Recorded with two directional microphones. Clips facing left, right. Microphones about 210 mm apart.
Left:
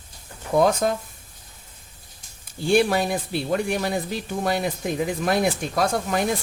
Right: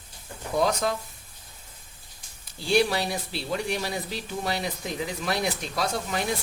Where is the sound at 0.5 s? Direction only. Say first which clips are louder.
Left 5 dB; 50° left (ahead or behind).